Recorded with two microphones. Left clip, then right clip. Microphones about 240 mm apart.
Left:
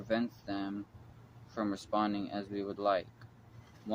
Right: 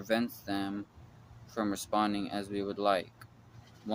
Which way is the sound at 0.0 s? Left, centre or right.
Right.